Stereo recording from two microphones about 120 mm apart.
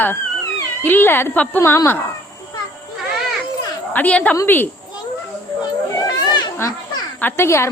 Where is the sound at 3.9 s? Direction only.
10° left (ahead or behind).